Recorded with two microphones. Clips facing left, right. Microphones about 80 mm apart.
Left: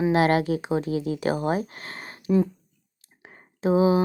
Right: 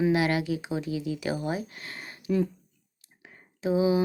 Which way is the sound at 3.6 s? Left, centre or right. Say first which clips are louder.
Left 4 dB; left.